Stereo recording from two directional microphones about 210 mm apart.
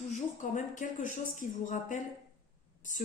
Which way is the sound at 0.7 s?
35° left (ahead or behind).